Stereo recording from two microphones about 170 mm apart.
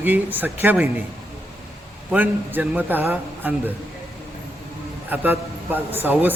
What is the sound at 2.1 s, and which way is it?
A man's voice, 10° right (ahead or behind).